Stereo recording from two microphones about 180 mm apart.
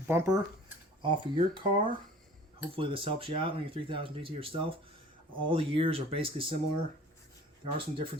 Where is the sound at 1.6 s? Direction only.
30° right (ahead or behind).